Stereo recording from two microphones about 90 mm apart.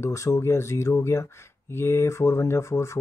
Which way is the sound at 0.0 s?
35° left (ahead or behind).